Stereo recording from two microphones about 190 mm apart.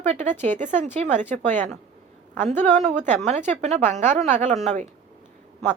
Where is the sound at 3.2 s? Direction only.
35° right (ahead or behind).